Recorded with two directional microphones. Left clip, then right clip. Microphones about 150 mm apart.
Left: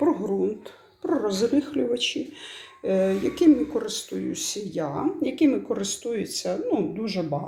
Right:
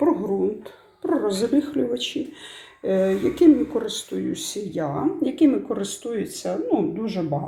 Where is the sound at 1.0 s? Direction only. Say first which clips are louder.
Right 1 dB; 5° left (ahead or behind).